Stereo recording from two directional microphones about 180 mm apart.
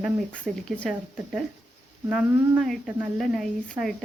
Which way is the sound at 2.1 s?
Centre (ahead or behind).